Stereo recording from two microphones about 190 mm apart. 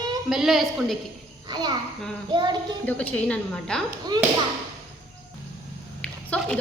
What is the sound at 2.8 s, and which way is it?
A woman's voice, 10° left (ahead or behind).